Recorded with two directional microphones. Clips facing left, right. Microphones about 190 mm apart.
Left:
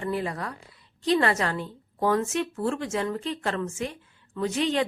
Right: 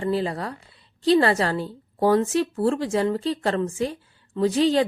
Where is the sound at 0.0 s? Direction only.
30° right (ahead or behind).